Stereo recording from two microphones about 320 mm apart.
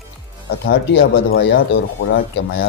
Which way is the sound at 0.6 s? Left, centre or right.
Left.